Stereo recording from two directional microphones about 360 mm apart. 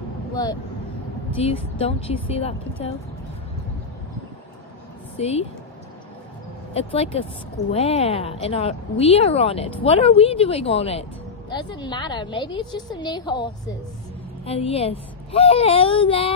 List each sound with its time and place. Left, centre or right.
0.4 s a woman's voice: centre
5.1 s a woman's voice: centre
6.7 s a woman's voice: centre